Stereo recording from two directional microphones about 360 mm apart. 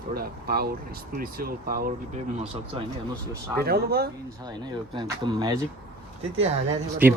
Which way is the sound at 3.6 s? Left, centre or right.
Right.